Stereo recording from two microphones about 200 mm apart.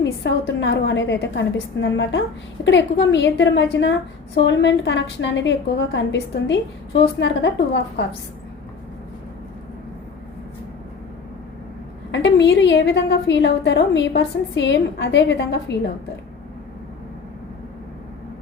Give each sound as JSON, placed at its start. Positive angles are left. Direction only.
{"t": 0.0, "sound": "a woman's voice", "side_deg": 60}
{"t": 12.1, "sound": "a woman's voice", "side_deg": 65}